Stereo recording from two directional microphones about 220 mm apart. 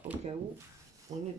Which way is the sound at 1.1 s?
15° right (ahead or behind).